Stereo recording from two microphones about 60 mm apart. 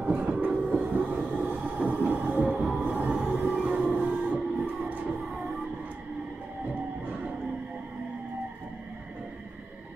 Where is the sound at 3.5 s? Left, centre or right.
Centre.